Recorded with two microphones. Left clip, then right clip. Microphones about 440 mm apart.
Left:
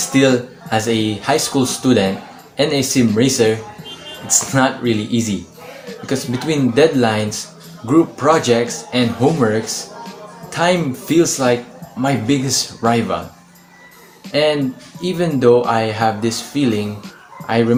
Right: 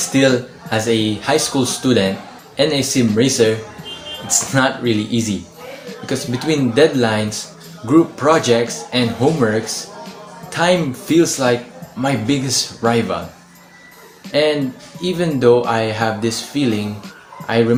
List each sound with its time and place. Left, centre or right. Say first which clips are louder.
0.1 s speech: left 1 dB; right
14.3 s speech: even; right